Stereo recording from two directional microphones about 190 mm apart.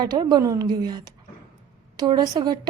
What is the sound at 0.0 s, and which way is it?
A woman's voice, 20° right (ahead or behind).